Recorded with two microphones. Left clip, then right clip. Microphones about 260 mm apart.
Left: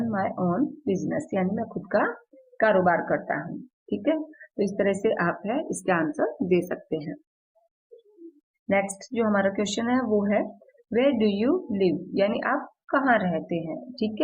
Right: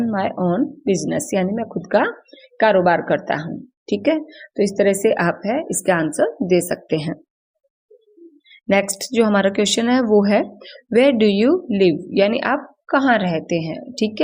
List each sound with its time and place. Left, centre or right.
0.1 s a woman's voice: right
8.7 s speech: right